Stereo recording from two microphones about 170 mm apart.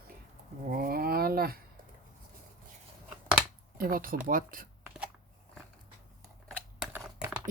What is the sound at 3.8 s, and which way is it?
Speech, 60° right (ahead or behind).